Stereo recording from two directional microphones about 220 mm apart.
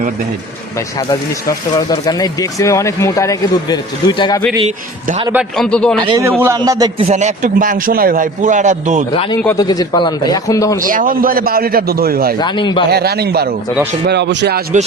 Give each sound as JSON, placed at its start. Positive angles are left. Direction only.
{"t": 0.9, "sound": "speech", "side_deg": 15}
{"t": 5.3, "sound": "a man's voice", "side_deg": 0}
{"t": 6.0, "sound": "a man's voice", "side_deg": -20}
{"t": 7.1, "sound": "a man's voice", "side_deg": -30}
{"t": 9.1, "sound": "speech", "side_deg": 25}
{"t": 10.8, "sound": "a man's voice", "side_deg": -40}
{"t": 12.4, "sound": "speech", "side_deg": 20}
{"t": 12.9, "sound": "a man's voice", "side_deg": -45}